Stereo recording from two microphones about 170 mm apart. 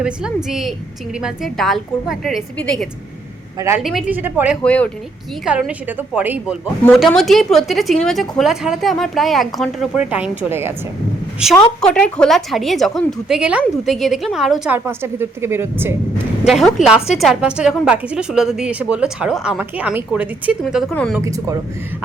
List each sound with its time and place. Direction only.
0.0 s a woman's voice: 5° right (ahead or behind)
3.8 s a woman's voice: 5° right (ahead or behind)
4.6 s speech: 10° left (ahead or behind)
5.5 s a woman's voice: 5° right (ahead or behind)
11.8 s a woman's voice: 5° left (ahead or behind); by 16.0 s 15° right (ahead or behind)
16.4 s a woman's voice: centre (ahead or behind)
21.2 s speech: 20° right (ahead or behind)